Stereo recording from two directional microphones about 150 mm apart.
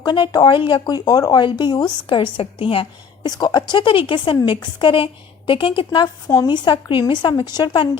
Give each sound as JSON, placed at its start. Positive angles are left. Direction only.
{"t": 0.0, "sound": "speech", "side_deg": 30}
{"t": 3.2, "sound": "speech", "side_deg": 30}